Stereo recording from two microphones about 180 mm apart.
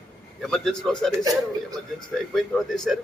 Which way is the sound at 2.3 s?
5° left (ahead or behind).